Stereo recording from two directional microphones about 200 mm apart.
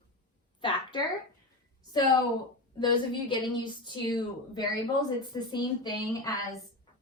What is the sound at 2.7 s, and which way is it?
Speech, 25° left (ahead or behind).